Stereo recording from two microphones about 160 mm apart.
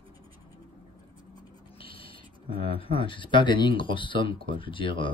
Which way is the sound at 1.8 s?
35° left (ahead or behind).